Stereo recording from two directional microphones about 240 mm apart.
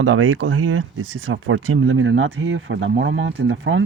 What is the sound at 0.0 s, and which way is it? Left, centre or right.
Speech, right.